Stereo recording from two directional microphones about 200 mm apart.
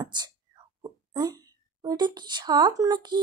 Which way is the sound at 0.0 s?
20° right (ahead or behind).